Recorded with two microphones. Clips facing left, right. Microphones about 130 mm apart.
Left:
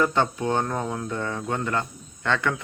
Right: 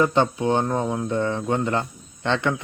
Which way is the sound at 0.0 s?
20° right (ahead or behind).